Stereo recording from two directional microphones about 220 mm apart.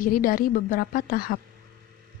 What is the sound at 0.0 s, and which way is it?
Speech, 40° left (ahead or behind).